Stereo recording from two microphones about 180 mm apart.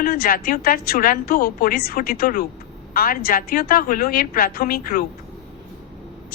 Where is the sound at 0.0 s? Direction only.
55° left (ahead or behind).